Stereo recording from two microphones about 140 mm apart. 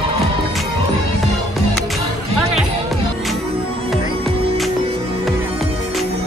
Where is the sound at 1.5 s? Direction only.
Centre (ahead or behind).